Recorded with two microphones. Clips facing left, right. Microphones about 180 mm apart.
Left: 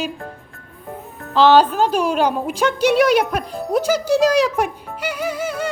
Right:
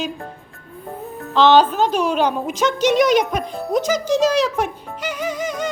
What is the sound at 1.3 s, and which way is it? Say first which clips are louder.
A woman's voice: left 1 dB; 10° left (ahead or behind).